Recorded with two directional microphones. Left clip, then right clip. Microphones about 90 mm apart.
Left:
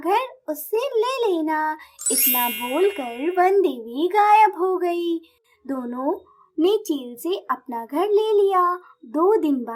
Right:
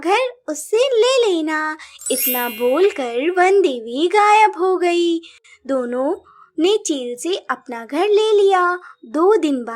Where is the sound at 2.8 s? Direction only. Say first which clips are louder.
Right 5 dB; 30° right (ahead or behind).